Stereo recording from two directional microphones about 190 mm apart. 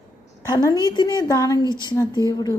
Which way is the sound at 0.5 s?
20° left (ahead or behind).